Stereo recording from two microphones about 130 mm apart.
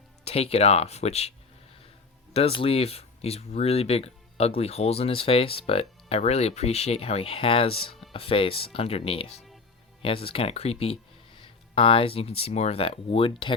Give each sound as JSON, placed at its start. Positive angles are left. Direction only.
{"t": 0.3, "sound": "speech", "side_deg": 50}
{"t": 2.3, "sound": "speech", "side_deg": 45}